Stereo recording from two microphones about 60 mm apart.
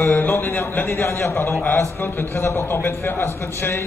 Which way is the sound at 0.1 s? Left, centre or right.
Left.